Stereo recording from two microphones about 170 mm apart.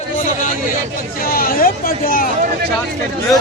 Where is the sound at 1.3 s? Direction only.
60° left (ahead or behind).